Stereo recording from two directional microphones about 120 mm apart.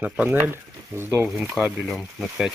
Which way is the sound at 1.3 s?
10° right (ahead or behind).